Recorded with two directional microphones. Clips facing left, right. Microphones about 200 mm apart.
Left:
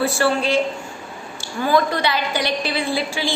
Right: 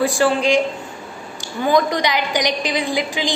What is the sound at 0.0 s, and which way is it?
Speech, 15° right (ahead or behind).